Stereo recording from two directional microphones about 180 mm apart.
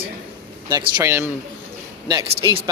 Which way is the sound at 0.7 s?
20° right (ahead or behind).